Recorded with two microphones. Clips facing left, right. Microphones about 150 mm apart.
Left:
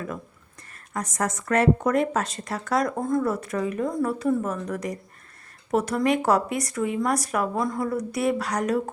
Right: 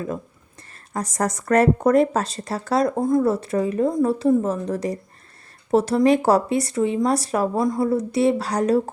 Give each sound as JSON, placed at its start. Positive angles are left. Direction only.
{"t": 0.9, "sound": "speech", "side_deg": -35}